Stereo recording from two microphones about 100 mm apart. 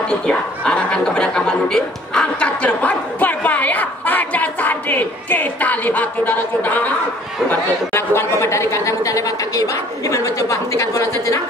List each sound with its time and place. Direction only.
0.1 s chuckle: 10° left (ahead or behind)
7.4 s a woman's voice: 25° left (ahead or behind)